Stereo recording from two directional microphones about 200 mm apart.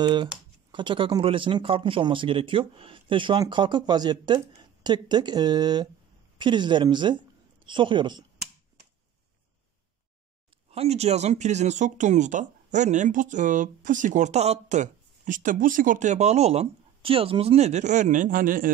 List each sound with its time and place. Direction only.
0.0 s speech: 20° right (ahead or behind)
10.7 s speech: 30° right (ahead or behind)